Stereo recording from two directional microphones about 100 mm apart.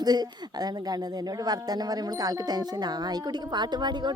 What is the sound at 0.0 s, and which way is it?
Speech, 40° right (ahead or behind).